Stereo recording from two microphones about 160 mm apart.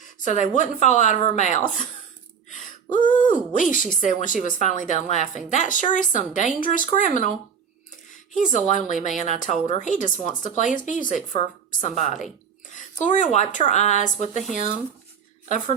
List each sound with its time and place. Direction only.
0.0 s a sound: 50° left (ahead or behind)
0.5 s speech: 50° left (ahead or behind)
2.5 s gasp: 50° left (ahead or behind)
3.5 s a woman's voice: 55° left (ahead or behind)
8.4 s speech: 50° left (ahead or behind)